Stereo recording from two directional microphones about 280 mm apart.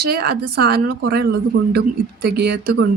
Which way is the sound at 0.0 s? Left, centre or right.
Right.